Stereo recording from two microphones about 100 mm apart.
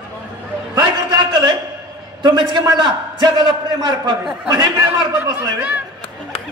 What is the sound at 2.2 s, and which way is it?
Speech, 50° right (ahead or behind).